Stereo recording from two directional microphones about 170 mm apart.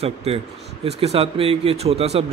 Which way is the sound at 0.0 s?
35° right (ahead or behind).